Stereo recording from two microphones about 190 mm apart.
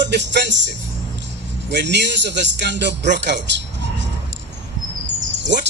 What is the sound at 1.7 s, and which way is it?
A man's voice, 65° right (ahead or behind).